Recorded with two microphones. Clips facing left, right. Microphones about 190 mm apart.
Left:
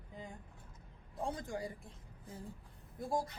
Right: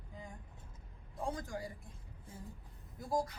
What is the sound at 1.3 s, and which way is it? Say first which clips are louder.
Speech: left 1 dB; 25° left (ahead or behind).